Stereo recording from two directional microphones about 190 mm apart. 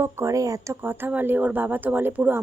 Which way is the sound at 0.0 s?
15° right (ahead or behind).